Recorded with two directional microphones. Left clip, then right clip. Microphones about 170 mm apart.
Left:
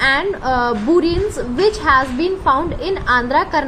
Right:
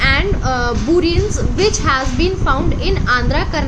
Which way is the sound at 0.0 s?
35° left (ahead or behind).